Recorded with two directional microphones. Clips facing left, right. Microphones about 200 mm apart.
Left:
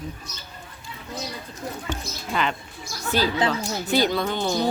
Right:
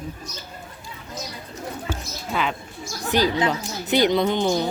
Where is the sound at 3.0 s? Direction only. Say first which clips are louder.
Right 2 dB; 15° right (ahead or behind).